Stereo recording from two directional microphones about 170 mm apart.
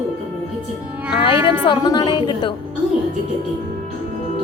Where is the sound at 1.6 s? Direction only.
30° left (ahead or behind).